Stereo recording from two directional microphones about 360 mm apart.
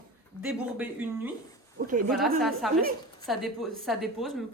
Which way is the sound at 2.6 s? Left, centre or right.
Centre.